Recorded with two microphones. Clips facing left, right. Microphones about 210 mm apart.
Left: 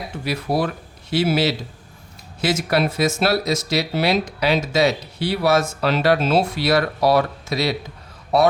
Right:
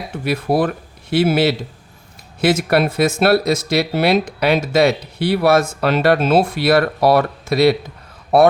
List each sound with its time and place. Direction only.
0.3 s speech: 55° right (ahead or behind)